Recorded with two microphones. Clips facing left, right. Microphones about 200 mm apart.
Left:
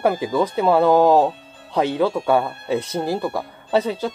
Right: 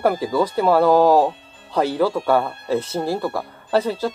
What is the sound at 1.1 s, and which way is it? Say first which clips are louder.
Speech: even; centre (ahead or behind).